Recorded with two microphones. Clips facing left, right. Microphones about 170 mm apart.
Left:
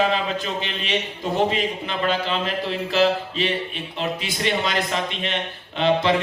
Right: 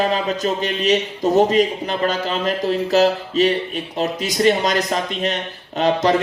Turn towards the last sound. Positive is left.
turn(degrees=-40)  # may be behind; listen again after turning